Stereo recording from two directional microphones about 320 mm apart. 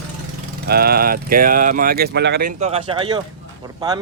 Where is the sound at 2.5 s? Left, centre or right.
Centre.